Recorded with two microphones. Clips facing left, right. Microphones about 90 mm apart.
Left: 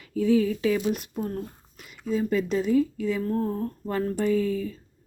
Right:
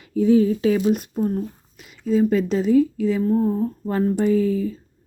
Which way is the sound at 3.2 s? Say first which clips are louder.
Right 7 dB; 10° right (ahead or behind).